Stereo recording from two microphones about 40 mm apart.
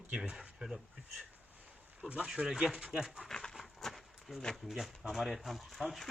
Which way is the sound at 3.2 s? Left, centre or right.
Centre.